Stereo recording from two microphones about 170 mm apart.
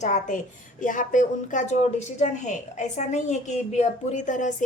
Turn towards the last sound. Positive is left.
turn(degrees=45)  # may be behind; listen again after turning